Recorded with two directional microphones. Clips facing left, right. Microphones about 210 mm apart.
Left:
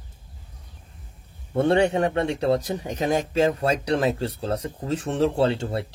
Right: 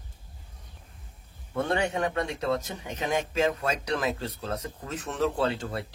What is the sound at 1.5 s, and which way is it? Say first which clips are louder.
Speech: left 8 dB; 30° left (ahead or behind).